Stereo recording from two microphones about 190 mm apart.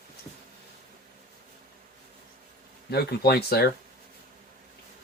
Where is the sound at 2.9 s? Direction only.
55° left (ahead or behind).